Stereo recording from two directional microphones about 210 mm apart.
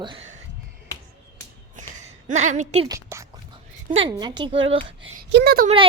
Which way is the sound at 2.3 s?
35° right (ahead or behind).